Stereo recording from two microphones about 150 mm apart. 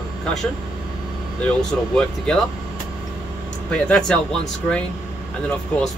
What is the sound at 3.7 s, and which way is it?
Speech, 5° left (ahead or behind).